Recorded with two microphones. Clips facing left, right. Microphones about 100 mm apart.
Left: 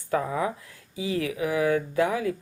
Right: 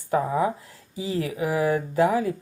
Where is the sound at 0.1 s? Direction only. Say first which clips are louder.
Right 3 dB; 30° right (ahead or behind).